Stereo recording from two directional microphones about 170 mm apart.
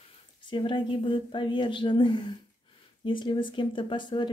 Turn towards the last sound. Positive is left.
turn(degrees=30)  # may be behind; listen again after turning